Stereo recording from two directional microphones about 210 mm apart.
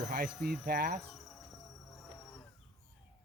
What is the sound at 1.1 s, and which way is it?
Insect, 5° left (ahead or behind).